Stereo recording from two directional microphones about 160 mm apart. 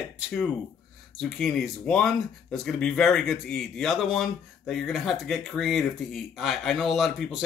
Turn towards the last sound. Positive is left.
turn(degrees=0)  # may be behind; listen again after turning